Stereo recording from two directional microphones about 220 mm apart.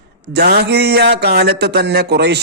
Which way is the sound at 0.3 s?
50° right (ahead or behind).